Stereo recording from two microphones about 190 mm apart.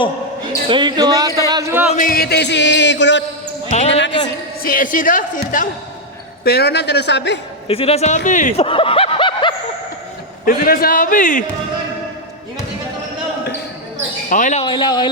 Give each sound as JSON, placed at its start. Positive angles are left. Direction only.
{"t": 0.7, "sound": "speech", "side_deg": -25}
{"t": 1.9, "sound": "music", "side_deg": 45}
{"t": 4.6, "sound": "a man's voice", "side_deg": 45}
{"t": 6.4, "sound": "a man's voice", "side_deg": 55}
{"t": 7.7, "sound": "speech", "side_deg": 30}
{"t": 8.6, "sound": "snicker", "side_deg": 30}
{"t": 10.4, "sound": "a man's voice", "side_deg": 50}
{"t": 14.3, "sound": "speech", "side_deg": 40}
{"t": 14.6, "sound": "speech", "side_deg": 25}